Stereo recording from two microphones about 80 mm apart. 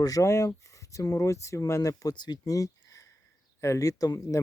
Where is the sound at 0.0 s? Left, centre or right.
Left.